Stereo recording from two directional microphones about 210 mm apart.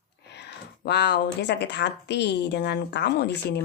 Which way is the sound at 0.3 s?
55° left (ahead or behind).